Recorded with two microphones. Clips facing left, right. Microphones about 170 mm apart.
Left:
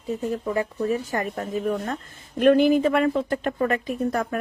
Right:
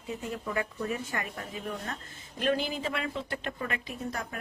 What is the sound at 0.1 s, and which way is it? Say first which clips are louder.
Speech: left 8 dB; 40° left (ahead or behind).